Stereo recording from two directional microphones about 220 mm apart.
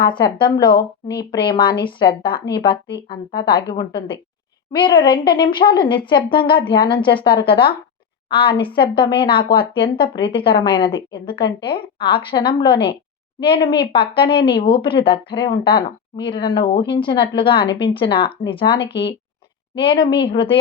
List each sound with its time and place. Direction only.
0.0 s speech: 20° left (ahead or behind)